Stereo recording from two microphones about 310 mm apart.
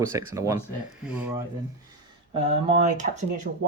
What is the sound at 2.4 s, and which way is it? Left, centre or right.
Speech, centre.